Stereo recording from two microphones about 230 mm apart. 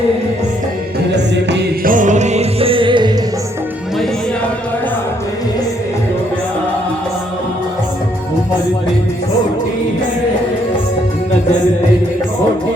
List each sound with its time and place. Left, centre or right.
1.1 s music: right